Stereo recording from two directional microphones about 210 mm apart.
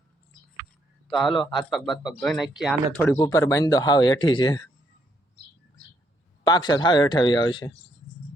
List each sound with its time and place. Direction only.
1.3 s speech: 25° left (ahead or behind)
1.5 s speech: centre (ahead or behind)
3.0 s speech: 15° left (ahead or behind)
6.4 s speech: 20° left (ahead or behind)